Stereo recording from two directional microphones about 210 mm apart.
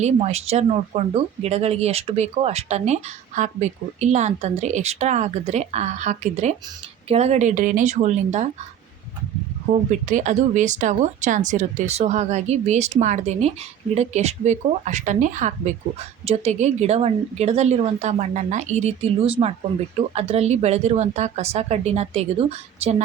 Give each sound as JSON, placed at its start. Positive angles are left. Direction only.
{"t": 0.0, "sound": "speech", "side_deg": -30}
{"t": 9.9, "sound": "speech", "side_deg": -35}